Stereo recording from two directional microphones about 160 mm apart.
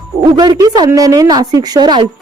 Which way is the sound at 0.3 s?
25° right (ahead or behind).